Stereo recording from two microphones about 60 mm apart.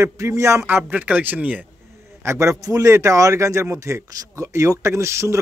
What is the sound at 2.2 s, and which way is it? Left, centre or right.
Speech, right.